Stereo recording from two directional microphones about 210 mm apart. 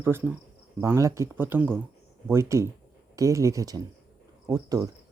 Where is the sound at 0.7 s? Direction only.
15° right (ahead or behind).